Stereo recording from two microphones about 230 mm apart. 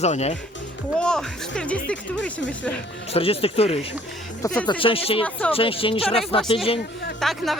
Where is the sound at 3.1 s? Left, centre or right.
Left.